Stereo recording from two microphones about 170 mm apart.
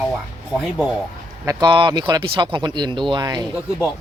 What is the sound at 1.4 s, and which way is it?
Speech, 20° right (ahead or behind).